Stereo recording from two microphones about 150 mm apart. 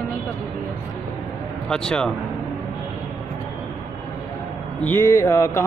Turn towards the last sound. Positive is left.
turn(degrees=20)  # may be behind; listen again after turning